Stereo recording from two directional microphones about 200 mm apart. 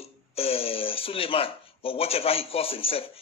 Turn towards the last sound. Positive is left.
turn(degrees=30)  # may be behind; listen again after turning